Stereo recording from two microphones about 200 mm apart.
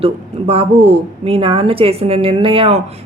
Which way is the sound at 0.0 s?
30° right (ahead or behind).